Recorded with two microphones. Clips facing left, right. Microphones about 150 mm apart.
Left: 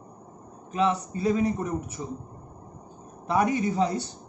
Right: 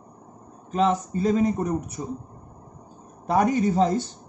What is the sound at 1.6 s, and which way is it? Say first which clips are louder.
Speech: right 4 dB; 40° right (ahead or behind).